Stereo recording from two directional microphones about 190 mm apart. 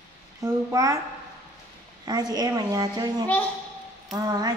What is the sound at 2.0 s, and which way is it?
A woman's voice, 20° right (ahead or behind).